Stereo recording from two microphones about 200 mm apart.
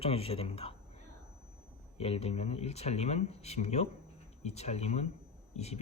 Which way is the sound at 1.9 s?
30° left (ahead or behind).